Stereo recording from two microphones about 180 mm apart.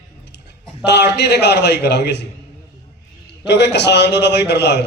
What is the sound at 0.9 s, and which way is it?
A man's voice, 70° left (ahead or behind).